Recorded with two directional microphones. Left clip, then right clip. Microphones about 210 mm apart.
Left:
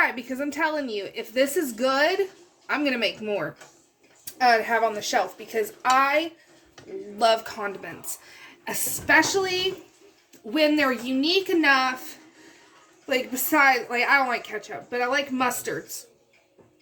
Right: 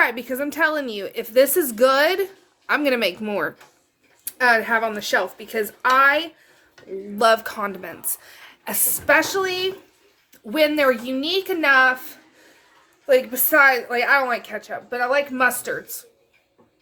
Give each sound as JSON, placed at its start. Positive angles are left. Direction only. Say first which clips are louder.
{"t": 0.0, "sound": "a woman's voice", "louder": "right 4 dB", "side_deg": -45}
{"t": 13.1, "sound": "a woman's voice", "louder": "right 7 dB", "side_deg": -50}